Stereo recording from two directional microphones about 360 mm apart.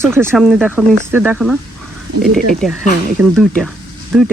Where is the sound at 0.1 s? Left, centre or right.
Centre.